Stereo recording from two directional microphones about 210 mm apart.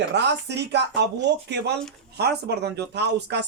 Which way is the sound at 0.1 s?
55° right (ahead or behind).